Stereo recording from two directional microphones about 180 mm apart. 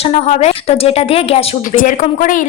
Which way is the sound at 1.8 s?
45° left (ahead or behind).